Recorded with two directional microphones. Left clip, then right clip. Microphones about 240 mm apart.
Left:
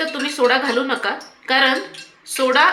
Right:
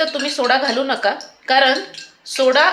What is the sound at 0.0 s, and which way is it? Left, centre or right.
A woman's voice, right.